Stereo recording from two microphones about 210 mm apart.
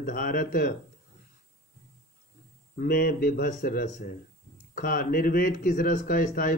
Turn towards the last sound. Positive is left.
turn(degrees=40)  # may be behind; listen again after turning